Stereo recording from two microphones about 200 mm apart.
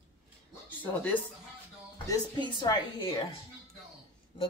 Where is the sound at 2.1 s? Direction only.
20° left (ahead or behind).